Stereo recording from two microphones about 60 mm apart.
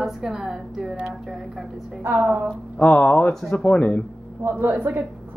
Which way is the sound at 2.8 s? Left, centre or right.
Left.